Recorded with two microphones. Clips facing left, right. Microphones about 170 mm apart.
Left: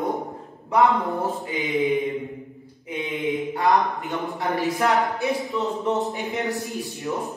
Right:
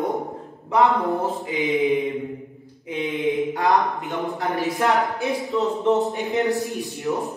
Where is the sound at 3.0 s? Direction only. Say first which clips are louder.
Right 3 dB; 20° right (ahead or behind).